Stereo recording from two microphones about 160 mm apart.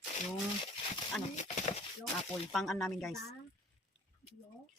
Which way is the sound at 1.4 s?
45° left (ahead or behind).